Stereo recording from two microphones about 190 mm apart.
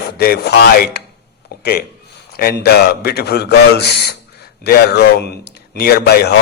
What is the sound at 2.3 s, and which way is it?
A man's voice, 55° left (ahead or behind).